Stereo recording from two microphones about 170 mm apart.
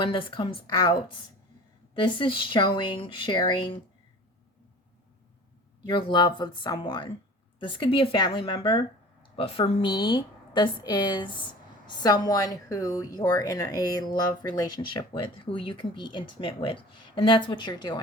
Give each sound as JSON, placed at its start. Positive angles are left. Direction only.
{"t": 0.0, "sound": "a woman's voice", "side_deg": 30}
{"t": 5.8, "sound": "a woman's voice", "side_deg": 30}